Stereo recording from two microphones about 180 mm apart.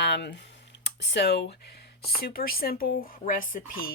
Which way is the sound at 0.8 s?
75° left (ahead or behind).